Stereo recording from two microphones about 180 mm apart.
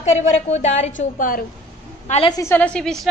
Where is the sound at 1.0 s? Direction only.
50° left (ahead or behind).